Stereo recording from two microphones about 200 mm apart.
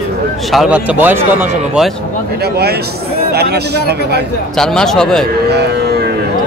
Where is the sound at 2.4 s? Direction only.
55° right (ahead or behind).